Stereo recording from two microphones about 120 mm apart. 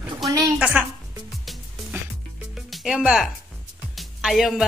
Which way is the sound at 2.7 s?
5° right (ahead or behind).